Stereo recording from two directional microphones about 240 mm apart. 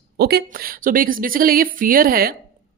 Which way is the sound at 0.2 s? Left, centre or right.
Right.